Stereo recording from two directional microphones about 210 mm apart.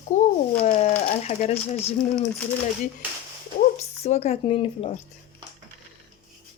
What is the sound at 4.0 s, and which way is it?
Speech, 30° left (ahead or behind).